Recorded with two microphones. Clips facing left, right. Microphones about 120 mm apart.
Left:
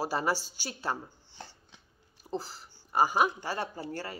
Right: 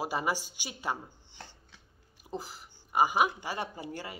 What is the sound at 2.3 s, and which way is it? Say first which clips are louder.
Speech: left 3 dB; 15° right (ahead or behind).